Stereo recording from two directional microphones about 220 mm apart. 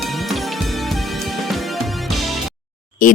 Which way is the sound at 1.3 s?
Centre (ahead or behind).